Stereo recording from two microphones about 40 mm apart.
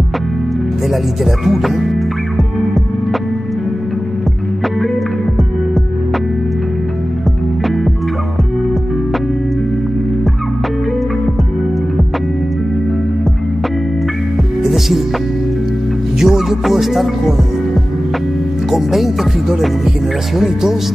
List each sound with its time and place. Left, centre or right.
1.2 s music: centre
16.2 s music: centre
18.7 s music: centre
20.3 s music: centre